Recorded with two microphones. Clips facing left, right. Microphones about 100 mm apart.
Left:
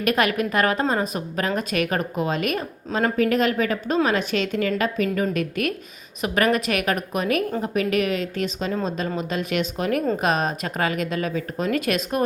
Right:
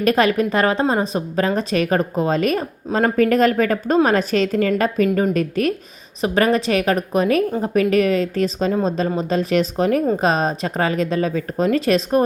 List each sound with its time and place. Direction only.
0.0 s a woman's voice: 35° right (ahead or behind)